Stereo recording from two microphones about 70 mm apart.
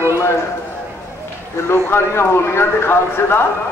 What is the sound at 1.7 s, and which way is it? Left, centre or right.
A man's voice, left.